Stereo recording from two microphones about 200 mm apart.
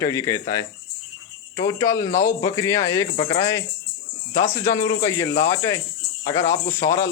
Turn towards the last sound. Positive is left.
turn(degrees=15)  # may be behind; listen again after turning